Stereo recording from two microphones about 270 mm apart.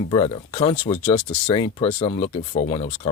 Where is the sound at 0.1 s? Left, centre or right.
Centre.